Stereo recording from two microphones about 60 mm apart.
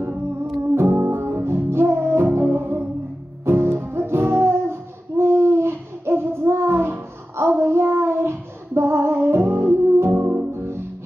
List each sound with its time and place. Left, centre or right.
1.0 s music: right
10.1 s music: right
10.5 s music: right